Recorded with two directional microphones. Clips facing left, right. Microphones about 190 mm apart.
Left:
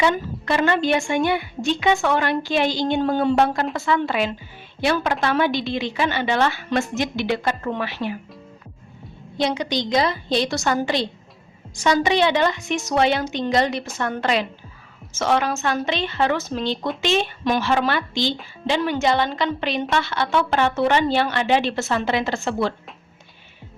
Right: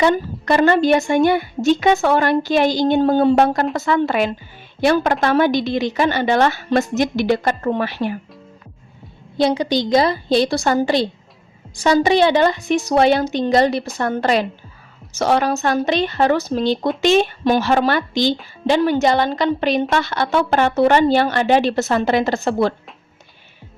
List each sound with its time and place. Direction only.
0.0 s speech: 40° right (ahead or behind)
9.4 s speech: 35° right (ahead or behind)